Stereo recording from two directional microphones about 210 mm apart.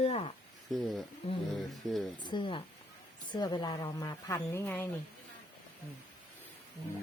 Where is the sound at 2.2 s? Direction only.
20° left (ahead or behind).